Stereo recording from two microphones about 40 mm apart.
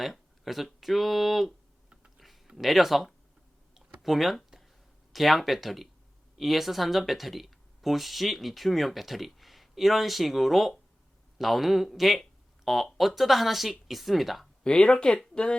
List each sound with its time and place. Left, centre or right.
0.0 s speech: centre
2.1 s a sound: centre
2.6 s speech: centre
3.8 s computer keyboard: centre
5.1 s speech: centre
14.6 s speech: centre